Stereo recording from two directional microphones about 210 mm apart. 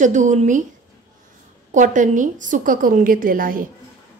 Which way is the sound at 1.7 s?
35° right (ahead or behind).